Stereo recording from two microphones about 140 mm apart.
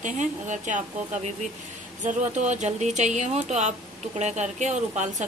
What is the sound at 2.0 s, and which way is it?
A woman's voice, 55° right (ahead or behind).